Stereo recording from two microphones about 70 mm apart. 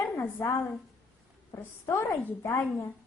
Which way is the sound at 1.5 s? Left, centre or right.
Left.